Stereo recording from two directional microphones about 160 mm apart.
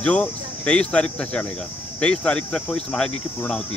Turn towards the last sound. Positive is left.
turn(degrees=5)  # may be behind; listen again after turning